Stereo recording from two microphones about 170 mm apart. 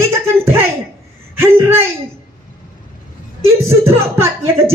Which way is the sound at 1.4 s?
15° right (ahead or behind).